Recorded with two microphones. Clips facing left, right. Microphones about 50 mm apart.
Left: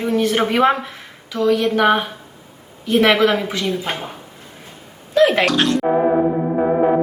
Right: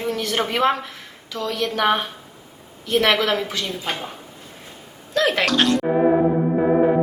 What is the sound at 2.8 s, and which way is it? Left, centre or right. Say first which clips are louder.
Speech: left 4 dB; left.